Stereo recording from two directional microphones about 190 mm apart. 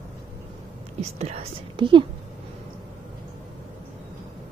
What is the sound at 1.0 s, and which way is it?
A woman's voice, 35° right (ahead or behind).